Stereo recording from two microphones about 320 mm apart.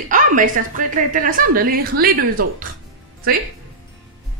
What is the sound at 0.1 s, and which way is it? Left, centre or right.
A woman's voice, right.